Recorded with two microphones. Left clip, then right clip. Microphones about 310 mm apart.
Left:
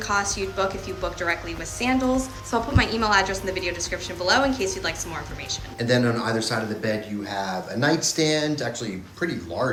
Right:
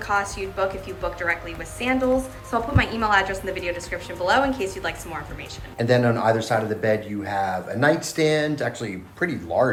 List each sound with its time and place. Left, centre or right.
0.1 s a woman's voice: centre
5.8 s speech: centre